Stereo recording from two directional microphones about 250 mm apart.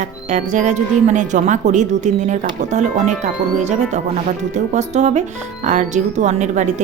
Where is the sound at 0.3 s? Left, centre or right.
Right.